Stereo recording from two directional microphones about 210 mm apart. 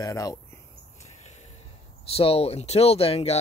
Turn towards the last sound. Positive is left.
turn(degrees=30)  # may be behind; listen again after turning